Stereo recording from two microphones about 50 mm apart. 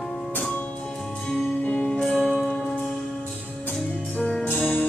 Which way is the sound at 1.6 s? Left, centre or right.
Left.